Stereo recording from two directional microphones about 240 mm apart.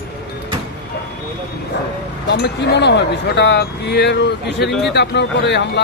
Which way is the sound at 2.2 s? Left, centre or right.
Left.